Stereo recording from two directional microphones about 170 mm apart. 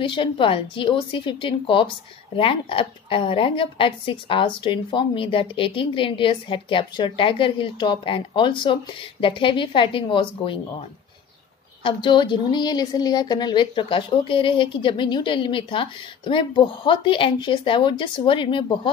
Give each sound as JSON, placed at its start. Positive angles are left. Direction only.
{"t": 0.0, "sound": "a woman's voice", "side_deg": 30}
{"t": 11.8, "sound": "a woman's voice", "side_deg": 30}